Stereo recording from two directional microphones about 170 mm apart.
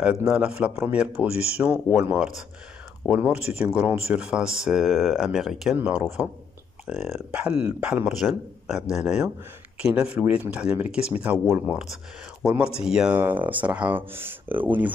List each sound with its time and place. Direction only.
0.0 s speech: 5° right (ahead or behind)
1.3 s speech: 35° left (ahead or behind)
1.6 s speech: 5° right (ahead or behind)